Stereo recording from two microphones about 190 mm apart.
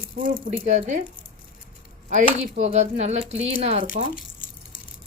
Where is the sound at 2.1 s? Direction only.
40° right (ahead or behind).